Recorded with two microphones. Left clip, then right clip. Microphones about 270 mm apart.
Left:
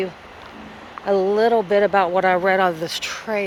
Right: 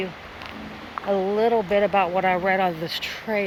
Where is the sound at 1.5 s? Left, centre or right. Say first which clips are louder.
Left 3 dB; left.